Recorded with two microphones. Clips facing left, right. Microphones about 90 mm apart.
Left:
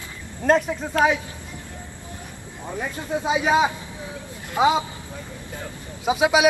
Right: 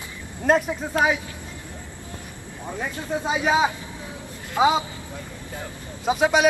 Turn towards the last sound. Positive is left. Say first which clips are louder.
# left 1 dB
turn(degrees=5)  # may be behind; listen again after turning